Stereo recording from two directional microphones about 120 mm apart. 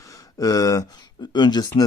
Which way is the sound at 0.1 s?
30° left (ahead or behind).